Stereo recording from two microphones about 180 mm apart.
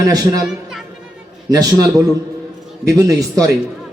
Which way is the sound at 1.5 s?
20° right (ahead or behind).